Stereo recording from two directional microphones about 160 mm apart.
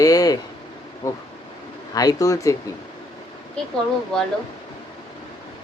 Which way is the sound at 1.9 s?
20° left (ahead or behind).